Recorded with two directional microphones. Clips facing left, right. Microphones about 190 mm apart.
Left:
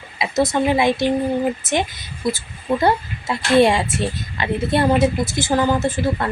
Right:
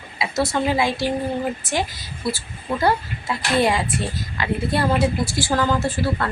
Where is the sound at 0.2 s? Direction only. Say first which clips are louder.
Left 3 dB; 20° left (ahead or behind).